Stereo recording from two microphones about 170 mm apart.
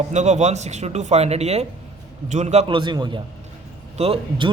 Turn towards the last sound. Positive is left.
turn(degrees=-30)  # may be behind; listen again after turning